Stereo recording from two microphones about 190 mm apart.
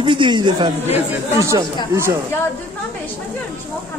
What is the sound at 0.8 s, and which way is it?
Speech, 15° right (ahead or behind).